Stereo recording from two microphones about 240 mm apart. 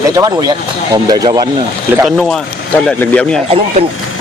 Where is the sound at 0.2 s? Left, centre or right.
Centre.